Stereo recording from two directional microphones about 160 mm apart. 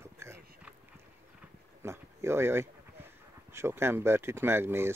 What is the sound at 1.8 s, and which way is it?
Speech, 15° right (ahead or behind).